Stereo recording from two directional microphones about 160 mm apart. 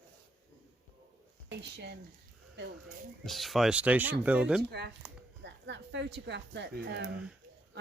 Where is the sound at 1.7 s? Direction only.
90° right.